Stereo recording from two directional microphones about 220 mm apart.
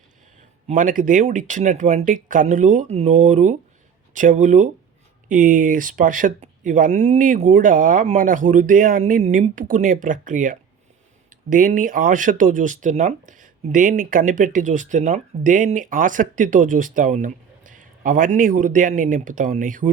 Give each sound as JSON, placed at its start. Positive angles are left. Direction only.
{"t": 0.7, "sound": "speech", "side_deg": -35}